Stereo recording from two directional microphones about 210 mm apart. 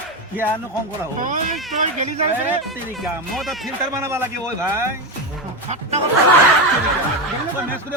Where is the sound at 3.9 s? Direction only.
15° right (ahead or behind).